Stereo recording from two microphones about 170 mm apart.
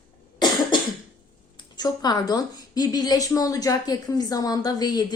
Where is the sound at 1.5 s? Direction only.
25° left (ahead or behind).